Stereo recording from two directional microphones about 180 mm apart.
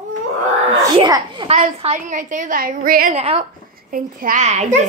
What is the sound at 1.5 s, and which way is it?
A child's voice, 40° right (ahead or behind).